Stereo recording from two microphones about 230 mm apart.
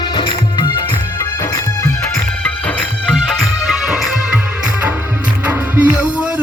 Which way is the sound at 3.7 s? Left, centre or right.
Centre.